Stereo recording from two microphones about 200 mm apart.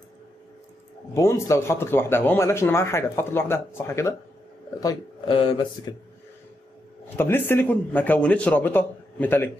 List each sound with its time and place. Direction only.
1.1 s speech: 15° left (ahead or behind)
7.2 s speech: 10° left (ahead or behind)